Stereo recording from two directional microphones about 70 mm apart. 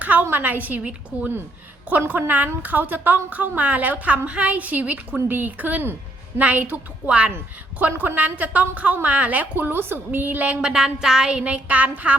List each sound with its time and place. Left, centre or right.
0.0 s a woman's voice: right